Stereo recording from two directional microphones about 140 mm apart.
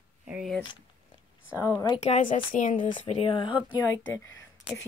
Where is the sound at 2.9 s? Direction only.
35° left (ahead or behind).